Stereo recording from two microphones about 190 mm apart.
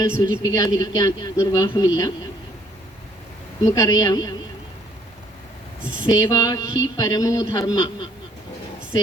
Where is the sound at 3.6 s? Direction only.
15° left (ahead or behind).